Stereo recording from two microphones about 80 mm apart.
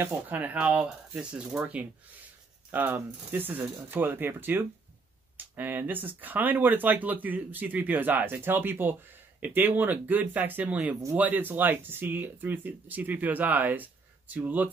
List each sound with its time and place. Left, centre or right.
0.0 s speech: right
0.7 s speech: centre